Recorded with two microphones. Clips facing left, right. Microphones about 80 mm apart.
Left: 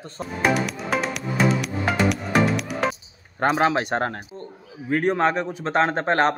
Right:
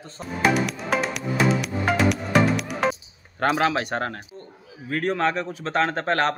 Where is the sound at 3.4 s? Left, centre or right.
Left.